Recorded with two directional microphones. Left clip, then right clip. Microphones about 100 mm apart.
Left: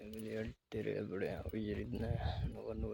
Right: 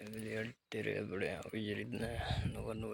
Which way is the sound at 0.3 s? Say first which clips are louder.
Right 1 dB; 15° left (ahead or behind).